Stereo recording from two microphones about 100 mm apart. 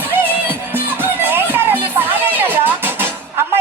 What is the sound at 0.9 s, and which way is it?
Music, 20° right (ahead or behind).